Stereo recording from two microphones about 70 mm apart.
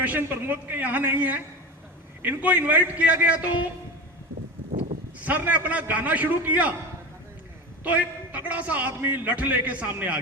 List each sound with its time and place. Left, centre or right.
0.0 s a man's voice: right
5.2 s a man's voice: right
7.9 s a man's voice: right